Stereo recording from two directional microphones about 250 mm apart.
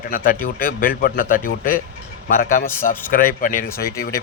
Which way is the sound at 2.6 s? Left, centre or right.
Centre.